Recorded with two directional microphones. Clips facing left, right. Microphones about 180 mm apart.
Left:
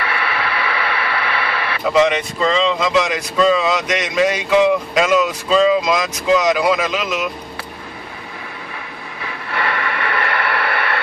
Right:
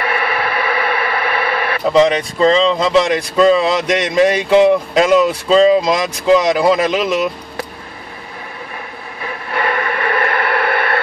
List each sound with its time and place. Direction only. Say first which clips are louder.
0.0 s a sound: right 4 dB; 45° right (ahead or behind)
1.9 s speech: right 3 dB; 35° right (ahead or behind)
9.5 s radio: right 4 dB; 45° right (ahead or behind)